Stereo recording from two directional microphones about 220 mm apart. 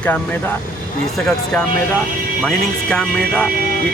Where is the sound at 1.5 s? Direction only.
5° left (ahead or behind).